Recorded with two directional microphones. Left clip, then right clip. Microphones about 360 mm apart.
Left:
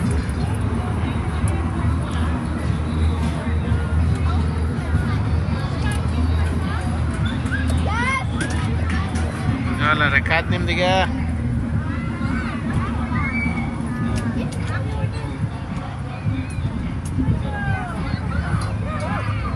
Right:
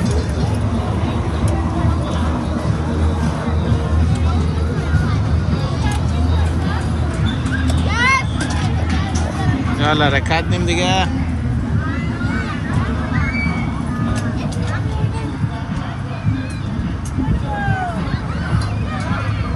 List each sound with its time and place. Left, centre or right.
7.9 s vehicle: centre
9.8 s speech: centre